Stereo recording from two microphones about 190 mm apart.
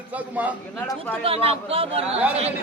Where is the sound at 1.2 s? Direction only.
30° right (ahead or behind).